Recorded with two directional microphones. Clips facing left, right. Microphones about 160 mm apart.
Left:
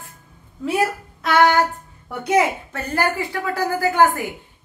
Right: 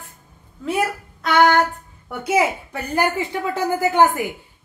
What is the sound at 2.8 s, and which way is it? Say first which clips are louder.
A woman's voice: right 1 dB; 20° right (ahead or behind).